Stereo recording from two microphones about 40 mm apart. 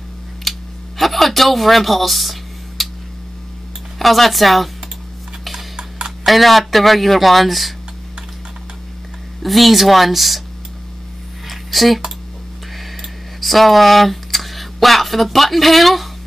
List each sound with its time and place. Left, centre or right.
0.4 s a sound: centre
4.0 s speech: centre
5.4 s tick-tock: centre
5.8 s tick-tock: right
6.2 s speech: centre
9.4 s speech: centre
11.4 s a sound: centre
13.4 s speech: centre